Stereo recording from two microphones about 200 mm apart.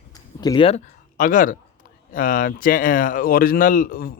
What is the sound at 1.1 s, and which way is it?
Speech, 40° left (ahead or behind).